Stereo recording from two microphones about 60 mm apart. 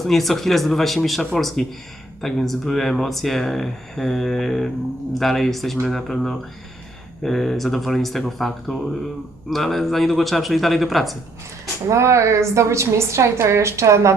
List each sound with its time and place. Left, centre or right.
0.1 s speech: centre
11.9 s a woman's voice: right